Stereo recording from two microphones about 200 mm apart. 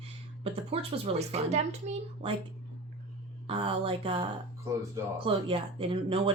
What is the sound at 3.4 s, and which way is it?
Speech, 25° right (ahead or behind).